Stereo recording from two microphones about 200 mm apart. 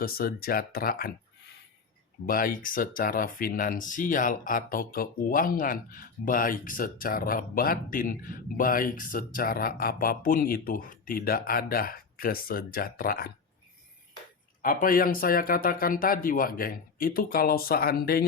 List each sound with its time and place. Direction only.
0.0 s speech: 50° left (ahead or behind)
2.2 s speech: 45° left (ahead or behind)
14.6 s speech: 45° left (ahead or behind)